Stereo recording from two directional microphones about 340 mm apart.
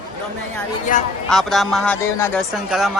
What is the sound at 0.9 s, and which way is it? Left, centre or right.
Speech, left.